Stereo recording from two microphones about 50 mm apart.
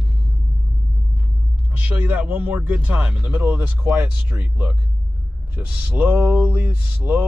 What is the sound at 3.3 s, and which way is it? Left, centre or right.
Mantra, right.